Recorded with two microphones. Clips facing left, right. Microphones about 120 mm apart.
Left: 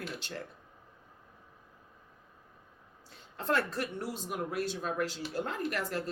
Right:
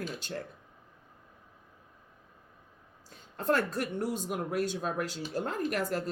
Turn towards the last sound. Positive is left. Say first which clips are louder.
# right 3 dB
turn(degrees=-45)  # may be behind; listen again after turning